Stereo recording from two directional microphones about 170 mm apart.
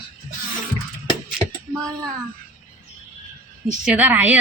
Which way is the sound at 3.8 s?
10° right (ahead or behind).